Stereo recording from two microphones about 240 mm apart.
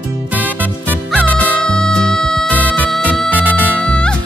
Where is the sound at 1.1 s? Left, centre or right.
Centre.